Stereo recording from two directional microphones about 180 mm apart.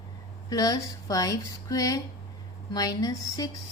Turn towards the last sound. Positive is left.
turn(degrees=20)  # may be behind; listen again after turning